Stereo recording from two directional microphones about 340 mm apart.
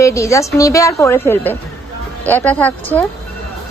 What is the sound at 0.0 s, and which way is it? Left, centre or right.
A woman's voice, centre.